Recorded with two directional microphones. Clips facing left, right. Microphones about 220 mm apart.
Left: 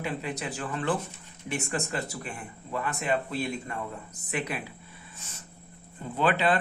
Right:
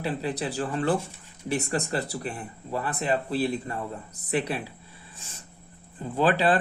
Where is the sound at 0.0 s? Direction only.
35° right (ahead or behind).